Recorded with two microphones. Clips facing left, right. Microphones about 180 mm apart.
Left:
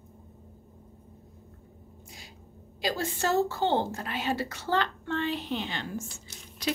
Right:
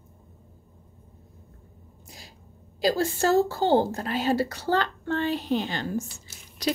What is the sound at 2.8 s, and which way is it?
A woman's voice, 35° right (ahead or behind).